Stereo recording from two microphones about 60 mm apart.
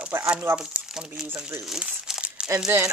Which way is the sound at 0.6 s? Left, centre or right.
Centre.